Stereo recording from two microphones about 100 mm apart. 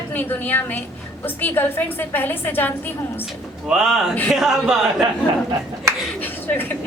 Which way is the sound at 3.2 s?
5° right (ahead or behind).